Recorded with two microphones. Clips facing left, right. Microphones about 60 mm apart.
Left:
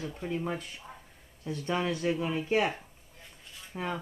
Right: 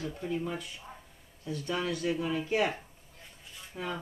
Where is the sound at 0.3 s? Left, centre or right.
Left.